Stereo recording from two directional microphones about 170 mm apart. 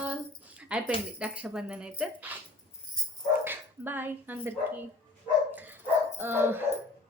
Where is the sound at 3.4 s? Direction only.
10° right (ahead or behind).